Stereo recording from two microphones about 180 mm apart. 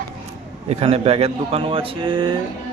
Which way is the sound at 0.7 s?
35° right (ahead or behind).